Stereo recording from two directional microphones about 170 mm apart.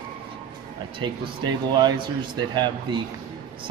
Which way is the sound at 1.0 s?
25° right (ahead or behind).